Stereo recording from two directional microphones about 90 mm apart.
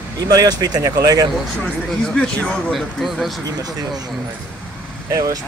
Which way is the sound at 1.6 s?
10° left (ahead or behind).